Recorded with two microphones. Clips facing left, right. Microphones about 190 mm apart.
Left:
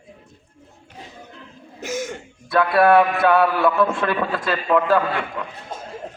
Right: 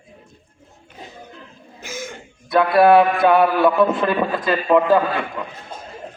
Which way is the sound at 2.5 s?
20° right (ahead or behind).